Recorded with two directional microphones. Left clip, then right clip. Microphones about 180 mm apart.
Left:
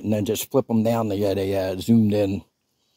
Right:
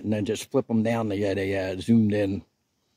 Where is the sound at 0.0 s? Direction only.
30° left (ahead or behind).